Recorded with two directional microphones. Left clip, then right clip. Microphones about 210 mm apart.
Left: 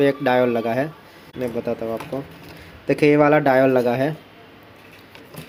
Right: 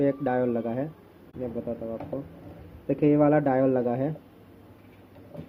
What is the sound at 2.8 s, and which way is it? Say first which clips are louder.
Speech: left 7 dB; 25° left (ahead or behind).